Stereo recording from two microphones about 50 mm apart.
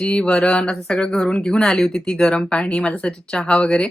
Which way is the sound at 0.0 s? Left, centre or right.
Centre.